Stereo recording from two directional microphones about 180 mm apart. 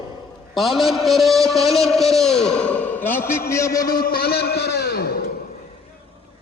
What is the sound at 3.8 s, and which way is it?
A man's voice, 55° left (ahead or behind).